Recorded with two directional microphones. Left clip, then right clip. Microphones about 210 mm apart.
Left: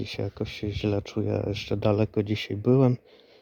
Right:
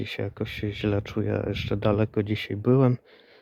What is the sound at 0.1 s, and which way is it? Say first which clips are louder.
Speech: right 1 dB; 5° left (ahead or behind).